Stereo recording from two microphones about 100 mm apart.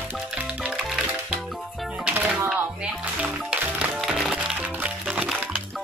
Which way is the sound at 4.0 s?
Centre (ahead or behind).